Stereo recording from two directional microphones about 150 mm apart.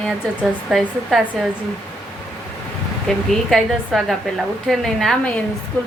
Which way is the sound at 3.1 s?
5° left (ahead or behind).